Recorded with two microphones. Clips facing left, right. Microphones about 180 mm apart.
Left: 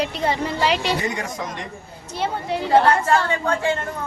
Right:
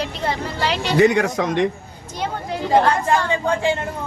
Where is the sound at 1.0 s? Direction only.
70° right (ahead or behind).